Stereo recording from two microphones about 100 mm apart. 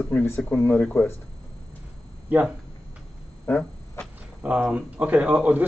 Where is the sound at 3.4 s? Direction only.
15° left (ahead or behind).